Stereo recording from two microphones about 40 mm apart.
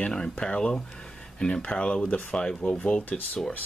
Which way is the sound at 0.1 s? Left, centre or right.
Left.